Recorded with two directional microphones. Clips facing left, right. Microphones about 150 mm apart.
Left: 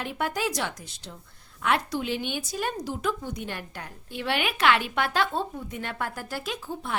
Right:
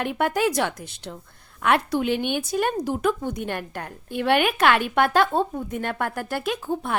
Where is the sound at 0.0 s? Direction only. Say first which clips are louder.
Right 6 dB; 60° right (ahead or behind).